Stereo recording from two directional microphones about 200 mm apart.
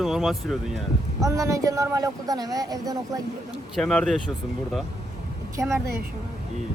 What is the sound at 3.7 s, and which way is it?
Speech, 5° left (ahead or behind).